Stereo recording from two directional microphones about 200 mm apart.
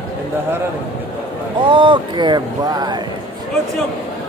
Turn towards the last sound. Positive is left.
turn(degrees=-20)  # may be behind; listen again after turning